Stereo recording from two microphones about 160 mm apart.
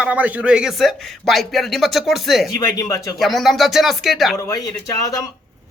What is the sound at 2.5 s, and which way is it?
Speech, 20° left (ahead or behind).